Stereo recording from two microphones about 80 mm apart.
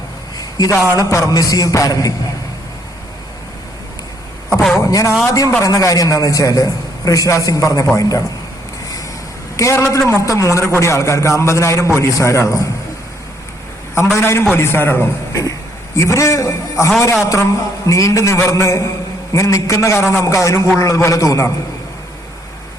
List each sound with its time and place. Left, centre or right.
0.9 s a man's voice: left
4.8 s a sound: left
5.3 s a man's voice: left
9.6 s a man's voice: left
14.2 s a man's voice: left